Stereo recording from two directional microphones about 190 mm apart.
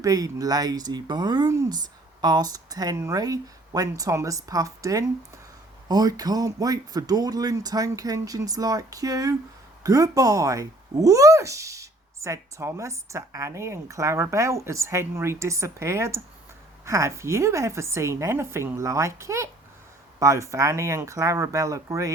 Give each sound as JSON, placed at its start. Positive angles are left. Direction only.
{"t": 0.0, "sound": "speech", "side_deg": -20}